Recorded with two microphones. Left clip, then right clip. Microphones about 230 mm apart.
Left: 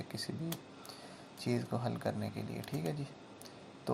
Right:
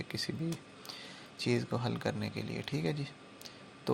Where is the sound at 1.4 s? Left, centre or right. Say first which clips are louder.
Right 3 dB; right.